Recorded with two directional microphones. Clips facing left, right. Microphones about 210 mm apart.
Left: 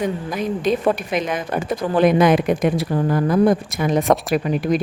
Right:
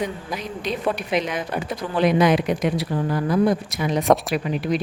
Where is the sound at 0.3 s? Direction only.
50° left (ahead or behind).